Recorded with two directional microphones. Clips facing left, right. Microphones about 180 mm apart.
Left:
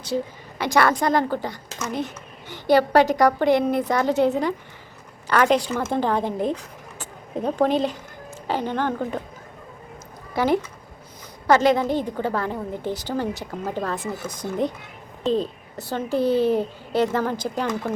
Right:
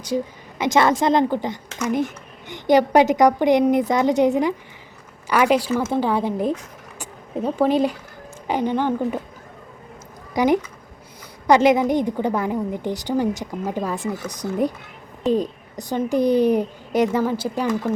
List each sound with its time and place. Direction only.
0.6 s a woman's voice: 20° right (ahead or behind)
10.3 s speech: 15° right (ahead or behind)